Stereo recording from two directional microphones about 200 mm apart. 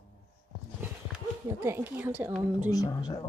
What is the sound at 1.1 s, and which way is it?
Speech, 10° right (ahead or behind).